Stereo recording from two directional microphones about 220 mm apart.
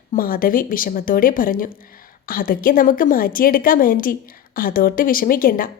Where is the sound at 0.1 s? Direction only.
40° left (ahead or behind).